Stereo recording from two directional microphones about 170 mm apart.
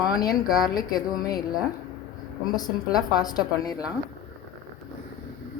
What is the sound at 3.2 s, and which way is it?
Speech, 25° left (ahead or behind).